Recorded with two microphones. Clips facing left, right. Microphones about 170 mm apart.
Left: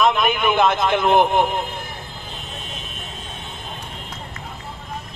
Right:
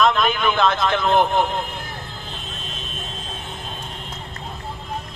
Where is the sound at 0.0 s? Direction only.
20° left (ahead or behind).